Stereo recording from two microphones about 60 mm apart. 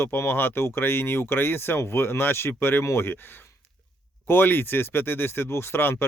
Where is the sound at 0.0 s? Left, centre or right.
Left.